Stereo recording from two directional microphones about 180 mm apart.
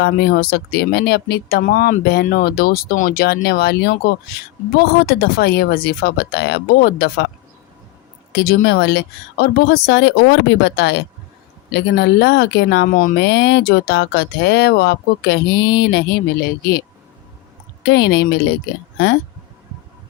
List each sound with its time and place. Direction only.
0.0 s speech: 65° left (ahead or behind)
8.4 s speech: 65° left (ahead or behind)
13.1 s speech: 70° left (ahead or behind)
17.8 s speech: 70° left (ahead or behind)